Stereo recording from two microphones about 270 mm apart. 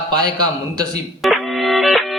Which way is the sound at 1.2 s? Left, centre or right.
Centre.